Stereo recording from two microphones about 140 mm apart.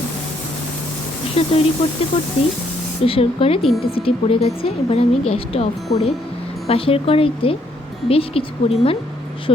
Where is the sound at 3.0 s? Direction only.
40° left (ahead or behind).